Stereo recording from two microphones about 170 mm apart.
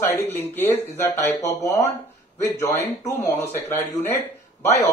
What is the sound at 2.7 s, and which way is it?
Speech, 20° left (ahead or behind).